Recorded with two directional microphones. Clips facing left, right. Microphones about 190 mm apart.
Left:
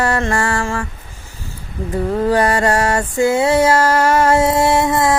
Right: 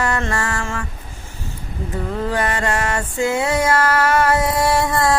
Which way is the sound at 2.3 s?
40° left (ahead or behind).